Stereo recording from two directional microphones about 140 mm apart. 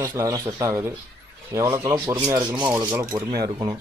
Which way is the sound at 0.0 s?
20° right (ahead or behind).